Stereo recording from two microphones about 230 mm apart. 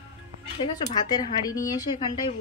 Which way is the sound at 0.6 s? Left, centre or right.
Centre.